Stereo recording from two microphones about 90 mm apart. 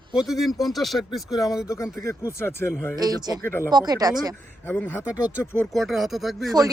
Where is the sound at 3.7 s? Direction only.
50° right (ahead or behind).